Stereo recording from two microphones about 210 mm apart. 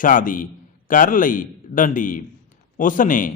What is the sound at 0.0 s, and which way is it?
A man's voice, 40° left (ahead or behind).